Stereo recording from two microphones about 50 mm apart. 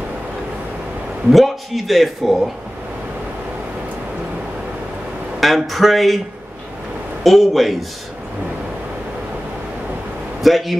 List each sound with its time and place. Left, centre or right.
1.3 s speech: centre
5.4 s speech: centre
7.2 s speech: centre
10.4 s speech: centre